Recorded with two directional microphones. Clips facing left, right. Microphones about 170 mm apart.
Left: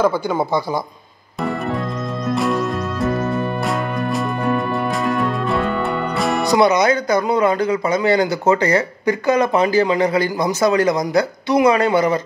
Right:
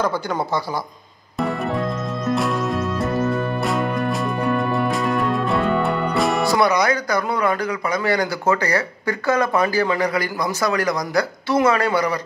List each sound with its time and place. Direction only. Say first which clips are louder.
2.3 s music: left 3 dB; centre (ahead or behind)
5.1 s music: left 1 dB; centre (ahead or behind)
6.4 s speech: left 6 dB; 20° left (ahead or behind)